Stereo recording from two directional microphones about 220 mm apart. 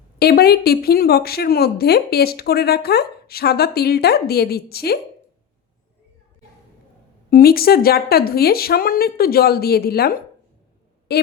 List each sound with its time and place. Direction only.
0.2 s a woman's voice: 45° left (ahead or behind)
7.3 s a woman's voice: 40° left (ahead or behind)